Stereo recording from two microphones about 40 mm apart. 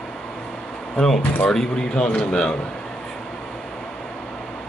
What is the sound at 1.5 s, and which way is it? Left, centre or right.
Speech, centre.